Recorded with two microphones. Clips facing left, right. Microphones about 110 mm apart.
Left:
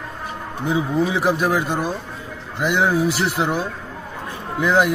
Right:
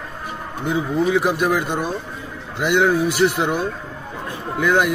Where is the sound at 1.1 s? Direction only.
Centre (ahead or behind).